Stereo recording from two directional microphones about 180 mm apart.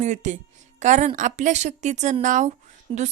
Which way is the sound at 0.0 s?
40° right (ahead or behind).